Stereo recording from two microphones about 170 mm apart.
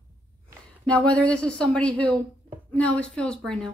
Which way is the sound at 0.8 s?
5° left (ahead or behind).